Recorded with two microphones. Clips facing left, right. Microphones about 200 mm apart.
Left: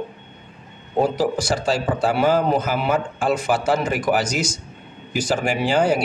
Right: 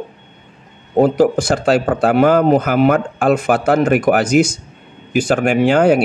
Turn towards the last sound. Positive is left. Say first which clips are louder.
# right 7 dB
turn(degrees=-60)  # may be behind; listen again after turning